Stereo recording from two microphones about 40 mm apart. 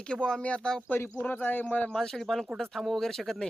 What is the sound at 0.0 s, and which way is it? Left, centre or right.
Speech, left.